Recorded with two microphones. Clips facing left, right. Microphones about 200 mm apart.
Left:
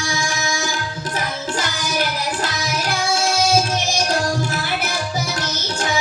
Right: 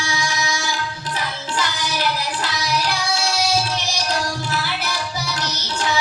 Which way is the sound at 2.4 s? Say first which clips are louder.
Even; 45° left (ahead or behind).